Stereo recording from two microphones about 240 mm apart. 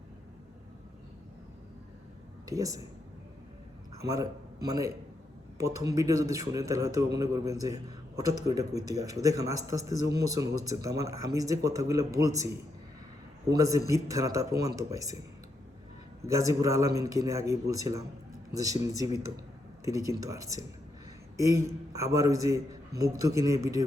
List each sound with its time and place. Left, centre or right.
2.5 s a man's voice: centre
4.1 s a man's voice: centre
16.2 s a man's voice: centre